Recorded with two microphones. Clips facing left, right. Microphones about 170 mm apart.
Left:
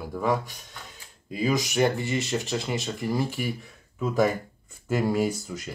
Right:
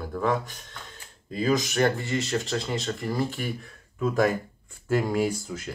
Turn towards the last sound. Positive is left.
turn(degrees=0)  # may be behind; listen again after turning